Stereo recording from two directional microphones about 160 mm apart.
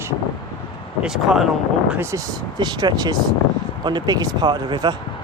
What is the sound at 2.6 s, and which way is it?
Speech, 25° right (ahead or behind).